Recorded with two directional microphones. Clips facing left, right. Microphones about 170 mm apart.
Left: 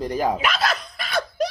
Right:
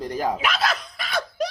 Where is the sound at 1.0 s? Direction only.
50° left (ahead or behind).